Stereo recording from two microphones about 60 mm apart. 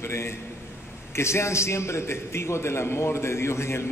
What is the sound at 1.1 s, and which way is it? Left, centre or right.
A man's voice, left.